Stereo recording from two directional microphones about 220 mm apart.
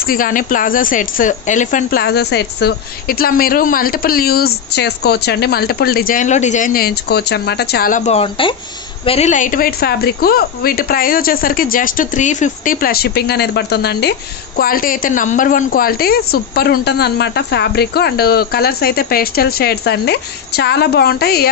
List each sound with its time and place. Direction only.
0.0 s speech: 40° left (ahead or behind)